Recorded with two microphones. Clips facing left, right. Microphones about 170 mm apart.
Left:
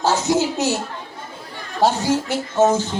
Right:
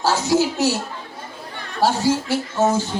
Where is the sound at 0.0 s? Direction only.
20° left (ahead or behind).